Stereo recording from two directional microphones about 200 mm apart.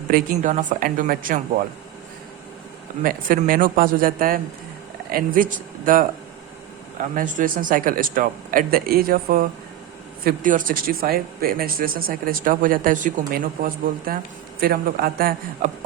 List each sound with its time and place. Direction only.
0.1 s speech: 40° right (ahead or behind)
3.0 s speech: 45° right (ahead or behind)
7.2 s speech: 45° right (ahead or behind)